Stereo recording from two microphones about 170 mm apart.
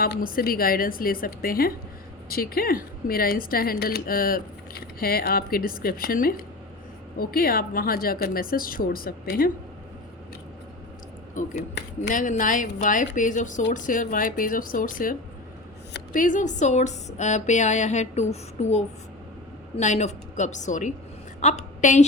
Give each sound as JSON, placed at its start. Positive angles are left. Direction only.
{"t": 0.0, "sound": "speech", "side_deg": 60}
{"t": 11.4, "sound": "a woman's voice", "side_deg": 50}
{"t": 16.1, "sound": "a woman's voice", "side_deg": 50}